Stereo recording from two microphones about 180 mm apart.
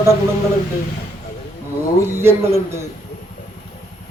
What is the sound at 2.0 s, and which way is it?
Speech, 15° right (ahead or behind).